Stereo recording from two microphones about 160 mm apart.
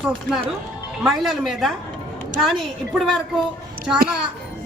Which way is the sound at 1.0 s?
Centre (ahead or behind).